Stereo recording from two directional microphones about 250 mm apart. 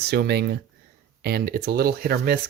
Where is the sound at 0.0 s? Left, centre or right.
Right.